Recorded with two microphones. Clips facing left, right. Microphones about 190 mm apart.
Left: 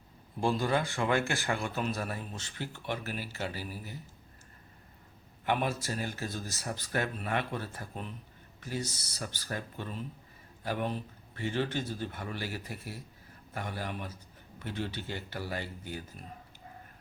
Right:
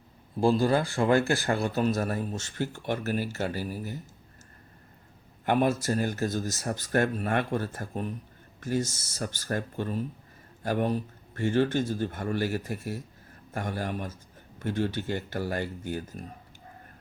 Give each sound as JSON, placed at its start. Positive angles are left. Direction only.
{"t": 0.3, "sound": "speech", "side_deg": -35}
{"t": 5.5, "sound": "speech", "side_deg": -45}